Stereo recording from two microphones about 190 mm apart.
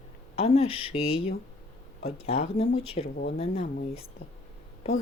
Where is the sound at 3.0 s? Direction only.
55° left (ahead or behind).